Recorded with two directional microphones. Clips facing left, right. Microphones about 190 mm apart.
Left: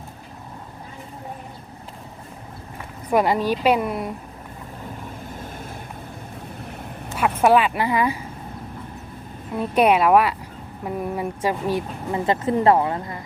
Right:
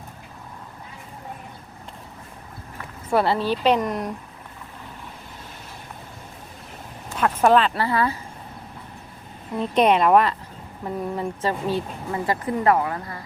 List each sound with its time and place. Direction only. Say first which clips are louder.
3.1 s speech: left 1 dB; 15° left (ahead or behind)
7.2 s speech: left 1 dB; 10° left (ahead or behind)
9.6 s speech: left 1 dB; 10° left (ahead or behind)
12.2 s speech: left 3 dB; 25° left (ahead or behind)